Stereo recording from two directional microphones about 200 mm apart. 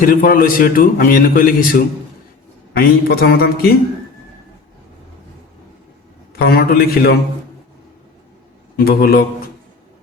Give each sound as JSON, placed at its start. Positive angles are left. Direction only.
{"t": 0.0, "sound": "a man's voice", "side_deg": 45}
{"t": 6.3, "sound": "a man's voice", "side_deg": 50}
{"t": 8.8, "sound": "a man's voice", "side_deg": 50}